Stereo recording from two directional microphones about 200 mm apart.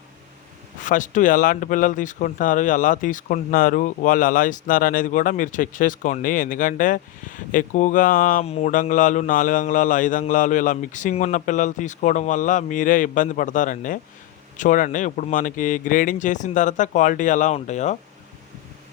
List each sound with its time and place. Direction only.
0.8 s speech: 40° left (ahead or behind)